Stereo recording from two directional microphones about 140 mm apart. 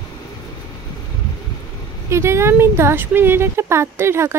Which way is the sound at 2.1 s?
20° right (ahead or behind).